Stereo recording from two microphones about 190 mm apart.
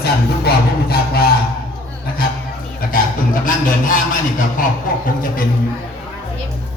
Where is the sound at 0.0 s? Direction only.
55° left (ahead or behind).